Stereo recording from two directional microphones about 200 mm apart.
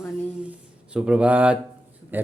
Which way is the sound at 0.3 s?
5° right (ahead or behind).